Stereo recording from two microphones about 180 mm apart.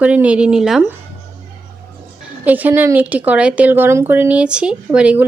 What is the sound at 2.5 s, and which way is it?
A woman's voice, 10° right (ahead or behind).